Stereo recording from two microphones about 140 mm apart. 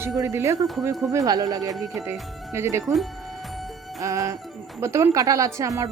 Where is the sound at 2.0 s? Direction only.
20° right (ahead or behind).